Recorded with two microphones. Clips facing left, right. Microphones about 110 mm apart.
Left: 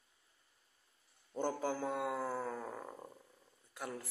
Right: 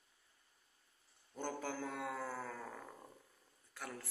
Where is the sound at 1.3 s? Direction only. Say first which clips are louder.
Left 6 dB; 25° left (ahead or behind).